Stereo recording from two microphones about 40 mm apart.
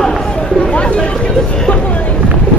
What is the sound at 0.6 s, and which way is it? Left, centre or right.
Speech, left.